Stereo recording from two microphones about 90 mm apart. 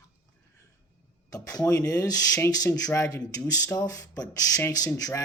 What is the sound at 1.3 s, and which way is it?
Speech, 40° left (ahead or behind).